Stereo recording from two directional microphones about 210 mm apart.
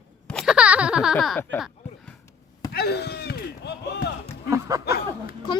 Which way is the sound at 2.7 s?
50° left (ahead or behind).